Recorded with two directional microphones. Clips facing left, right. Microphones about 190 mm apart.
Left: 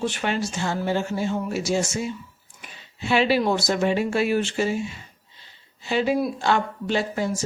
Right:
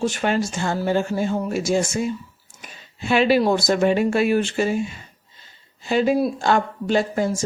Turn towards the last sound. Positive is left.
turn(degrees=-50)  # may be behind; listen again after turning